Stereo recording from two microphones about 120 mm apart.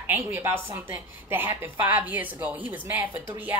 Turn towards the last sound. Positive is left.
turn(degrees=-15)  # may be behind; listen again after turning